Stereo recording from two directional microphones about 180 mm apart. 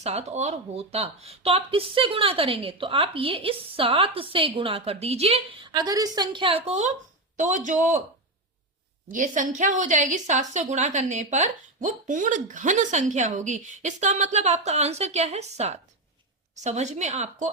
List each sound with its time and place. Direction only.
0.0 s a woman's voice: 35° right (ahead or behind)
9.0 s a woman's voice: 45° right (ahead or behind)